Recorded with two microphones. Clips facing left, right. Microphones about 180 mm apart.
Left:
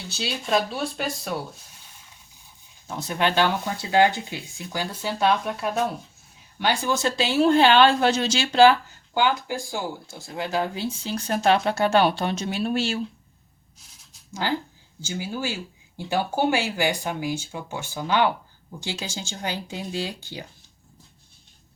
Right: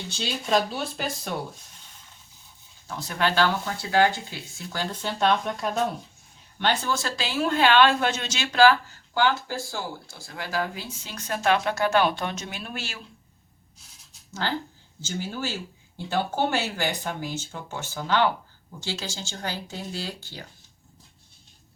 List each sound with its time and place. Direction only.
0.1 s speech: 5° left (ahead or behind)
2.8 s speech: 20° left (ahead or behind)
6.9 s speech: 20° left (ahead or behind)
14.3 s speech: 10° left (ahead or behind)